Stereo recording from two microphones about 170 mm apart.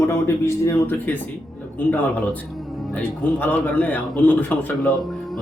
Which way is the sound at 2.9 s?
10° left (ahead or behind).